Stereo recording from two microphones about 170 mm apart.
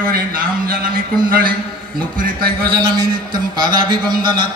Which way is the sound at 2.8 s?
25° right (ahead or behind).